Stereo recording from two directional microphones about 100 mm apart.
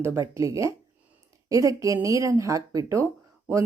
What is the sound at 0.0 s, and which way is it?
A woman's voice, 30° right (ahead or behind).